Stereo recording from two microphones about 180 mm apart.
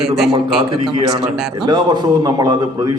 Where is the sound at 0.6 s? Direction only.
30° right (ahead or behind).